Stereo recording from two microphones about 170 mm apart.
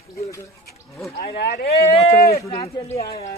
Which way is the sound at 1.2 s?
70° left (ahead or behind).